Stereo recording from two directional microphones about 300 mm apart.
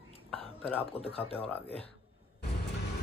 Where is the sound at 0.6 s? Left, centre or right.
Centre.